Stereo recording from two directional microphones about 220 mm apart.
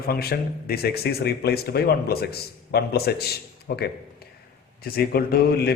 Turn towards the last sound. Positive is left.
turn(degrees=45)  # may be behind; listen again after turning